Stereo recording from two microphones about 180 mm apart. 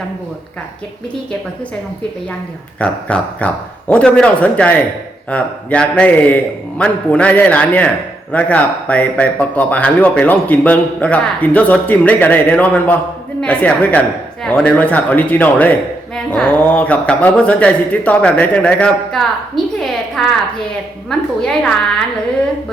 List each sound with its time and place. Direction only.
2.8 s a woman's voice: 5° left (ahead or behind)